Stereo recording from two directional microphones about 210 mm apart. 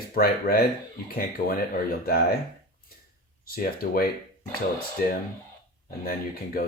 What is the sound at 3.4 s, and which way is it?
Speech, 45° left (ahead or behind).